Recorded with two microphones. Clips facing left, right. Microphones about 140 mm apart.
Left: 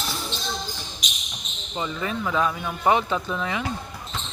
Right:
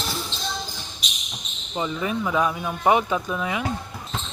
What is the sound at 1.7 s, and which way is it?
Speech, 15° right (ahead or behind).